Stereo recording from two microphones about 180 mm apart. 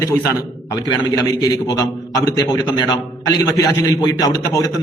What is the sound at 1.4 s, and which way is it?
A man's voice, 20° left (ahead or behind).